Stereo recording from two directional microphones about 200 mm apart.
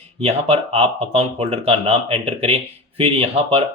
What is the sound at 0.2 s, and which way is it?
Speech, 30° right (ahead or behind).